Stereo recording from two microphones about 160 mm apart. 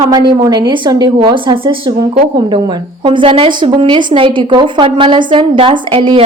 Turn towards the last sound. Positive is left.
turn(degrees=-35)  # may be behind; listen again after turning